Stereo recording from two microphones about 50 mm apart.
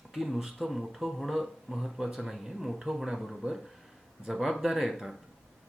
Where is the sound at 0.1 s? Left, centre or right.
Centre.